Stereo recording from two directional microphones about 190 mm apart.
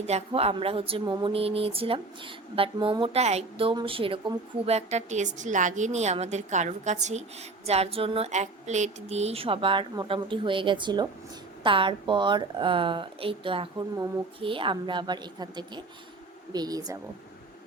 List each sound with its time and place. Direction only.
0.0 s speech: 35° right (ahead or behind)